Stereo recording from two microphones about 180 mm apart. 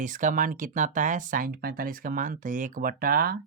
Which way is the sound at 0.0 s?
45° right (ahead or behind).